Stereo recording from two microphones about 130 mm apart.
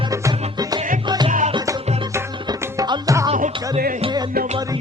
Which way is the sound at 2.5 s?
35° right (ahead or behind).